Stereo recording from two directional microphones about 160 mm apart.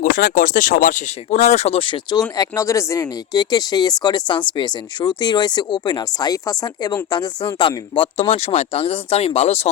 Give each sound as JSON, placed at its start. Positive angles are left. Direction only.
{"t": 0.0, "sound": "speech", "side_deg": 60}